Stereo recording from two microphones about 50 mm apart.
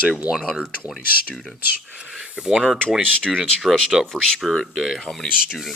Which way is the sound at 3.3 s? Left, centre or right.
Centre.